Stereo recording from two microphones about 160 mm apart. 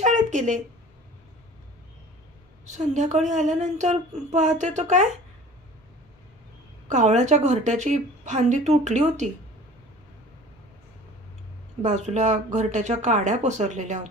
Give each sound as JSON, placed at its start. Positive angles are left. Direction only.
{"t": 0.0, "sound": "a sound", "side_deg": -50}
{"t": 2.6, "sound": "speech", "side_deg": -50}
{"t": 6.9, "sound": "speech", "side_deg": -50}
{"t": 11.8, "sound": "speech", "side_deg": -50}